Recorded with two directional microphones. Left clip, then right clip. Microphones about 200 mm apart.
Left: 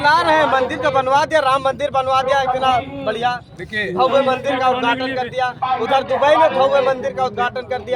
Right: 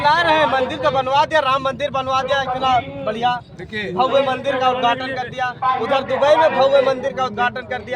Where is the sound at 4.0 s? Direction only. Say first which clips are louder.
Left 1 dB; 25° left (ahead or behind).